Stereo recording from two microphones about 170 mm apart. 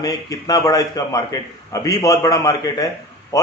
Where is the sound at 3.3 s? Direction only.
20° left (ahead or behind).